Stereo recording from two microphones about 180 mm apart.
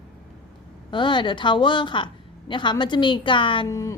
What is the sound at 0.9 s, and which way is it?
A woman's voice, 25° left (ahead or behind).